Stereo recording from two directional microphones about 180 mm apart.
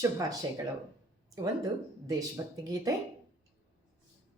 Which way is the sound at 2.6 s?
20° right (ahead or behind).